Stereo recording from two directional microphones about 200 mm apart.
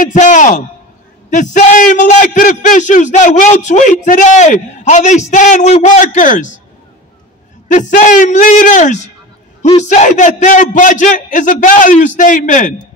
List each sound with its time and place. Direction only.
0.0 s a man's voice: 40° left (ahead or behind)
7.6 s a man's voice: 40° left (ahead or behind)